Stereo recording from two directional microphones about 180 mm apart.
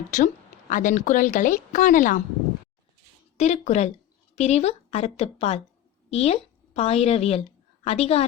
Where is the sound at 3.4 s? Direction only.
40° left (ahead or behind).